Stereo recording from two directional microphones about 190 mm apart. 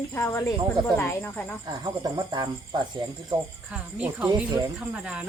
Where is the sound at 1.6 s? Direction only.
20° right (ahead or behind).